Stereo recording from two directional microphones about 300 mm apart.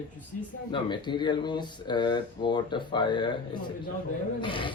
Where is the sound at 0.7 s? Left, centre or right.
Centre.